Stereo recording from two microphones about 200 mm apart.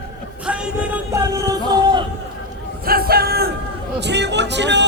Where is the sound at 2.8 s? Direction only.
50° right (ahead or behind).